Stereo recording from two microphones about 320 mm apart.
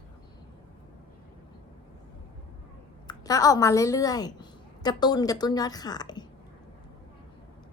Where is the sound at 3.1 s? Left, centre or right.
Centre.